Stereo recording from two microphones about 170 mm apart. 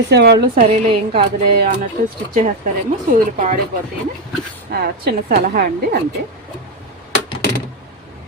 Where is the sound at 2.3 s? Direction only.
50° right (ahead or behind).